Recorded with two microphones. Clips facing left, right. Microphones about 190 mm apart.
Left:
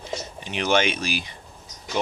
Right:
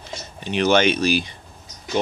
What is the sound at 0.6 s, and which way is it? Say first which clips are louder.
Speech: right 5 dB; 40° right (ahead or behind).